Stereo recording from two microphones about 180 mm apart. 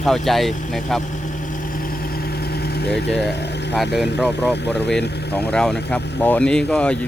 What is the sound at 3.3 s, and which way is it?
Vehicle, 70° left (ahead or behind).